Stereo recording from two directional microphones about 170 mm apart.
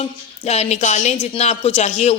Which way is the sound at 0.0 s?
40° left (ahead or behind).